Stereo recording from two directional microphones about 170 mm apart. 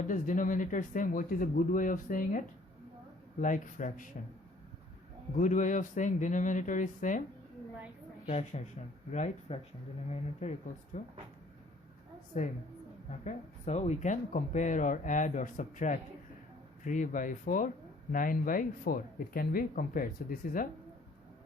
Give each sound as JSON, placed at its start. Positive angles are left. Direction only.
{"t": 0.1, "sound": "speech", "side_deg": 50}
{"t": 3.4, "sound": "speech", "side_deg": 50}
{"t": 5.4, "sound": "speech", "side_deg": 50}
{"t": 8.3, "sound": "speech", "side_deg": 40}
{"t": 13.1, "sound": "speech", "side_deg": 40}